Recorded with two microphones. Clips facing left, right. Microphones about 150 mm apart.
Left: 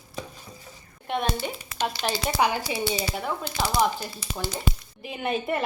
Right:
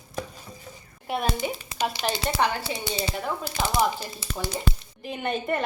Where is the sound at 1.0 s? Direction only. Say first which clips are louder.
Even; 5° right (ahead or behind).